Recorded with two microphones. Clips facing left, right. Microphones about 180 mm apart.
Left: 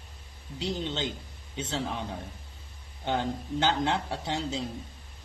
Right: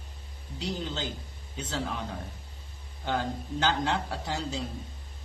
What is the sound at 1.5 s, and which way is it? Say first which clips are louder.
Speech: left 2 dB; 25° left (ahead or behind).